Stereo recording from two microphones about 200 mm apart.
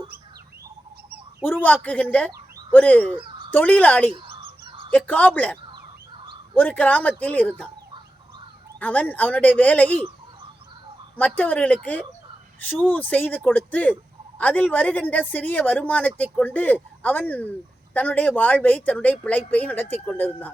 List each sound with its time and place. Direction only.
1.6 s a woman's voice: 10° left (ahead or behind)
3.1 s speech: 25° right (ahead or behind)
3.5 s a woman's voice: 10° left (ahead or behind)
4.1 s fowl: 25° right (ahead or behind)
4.9 s a woman's voice: 5° left (ahead or behind)
6.6 s a woman's voice: 10° left (ahead or behind)
8.8 s a woman's voice: 10° left (ahead or behind)
11.3 s a woman's voice: 10° left (ahead or behind)
12.8 s a woman's voice: 10° left (ahead or behind)